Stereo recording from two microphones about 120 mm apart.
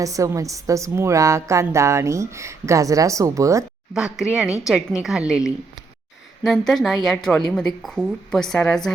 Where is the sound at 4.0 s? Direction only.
5° right (ahead or behind).